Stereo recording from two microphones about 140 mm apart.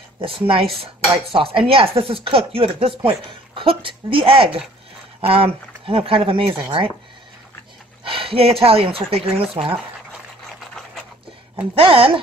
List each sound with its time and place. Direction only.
0.2 s speech: 40° right (ahead or behind)
8.0 s speech: 40° right (ahead or behind)
10.7 s a sound: centre (ahead or behind)
11.8 s speech: 40° right (ahead or behind)